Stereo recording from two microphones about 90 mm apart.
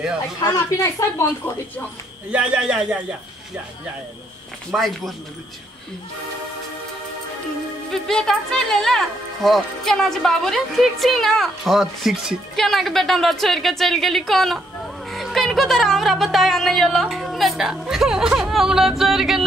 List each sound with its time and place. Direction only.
0.8 s a woman's voice: 35° left (ahead or behind)
2.3 s speech: 10° right (ahead or behind)
4.7 s speech: centre (ahead or behind)
7.9 s speech: 5° left (ahead or behind)